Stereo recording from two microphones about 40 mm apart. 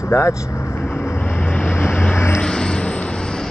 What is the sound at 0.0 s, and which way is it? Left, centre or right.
Speech, left.